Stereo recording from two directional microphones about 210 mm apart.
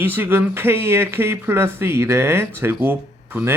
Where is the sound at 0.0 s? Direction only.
10° right (ahead or behind).